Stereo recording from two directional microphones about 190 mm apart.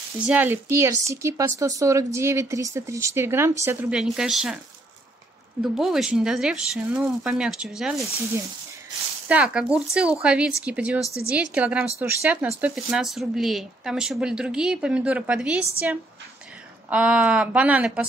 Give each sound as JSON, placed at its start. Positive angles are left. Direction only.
{"t": 0.2, "sound": "speech", "side_deg": -10}
{"t": 5.6, "sound": "speech", "side_deg": 0}
{"t": 9.3, "sound": "speech", "side_deg": -5}
{"t": 16.9, "sound": "speech", "side_deg": -5}